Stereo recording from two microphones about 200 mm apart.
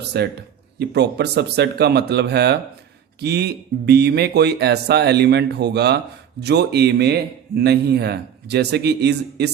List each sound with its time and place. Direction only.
0.0 s a man's voice: 55° right (ahead or behind)